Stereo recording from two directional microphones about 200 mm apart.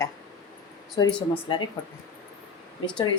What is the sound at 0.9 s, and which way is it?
Speech, 20° left (ahead or behind).